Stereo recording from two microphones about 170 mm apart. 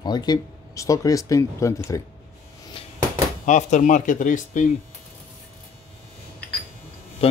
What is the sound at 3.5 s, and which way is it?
Speech, 45° left (ahead or behind).